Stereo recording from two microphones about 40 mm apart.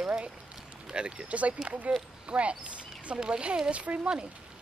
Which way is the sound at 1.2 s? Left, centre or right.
Right.